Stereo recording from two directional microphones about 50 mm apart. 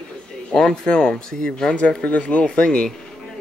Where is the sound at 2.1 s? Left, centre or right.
Left.